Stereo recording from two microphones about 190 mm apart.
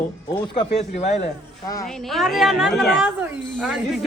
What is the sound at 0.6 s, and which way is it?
Speech, 35° left (ahead or behind).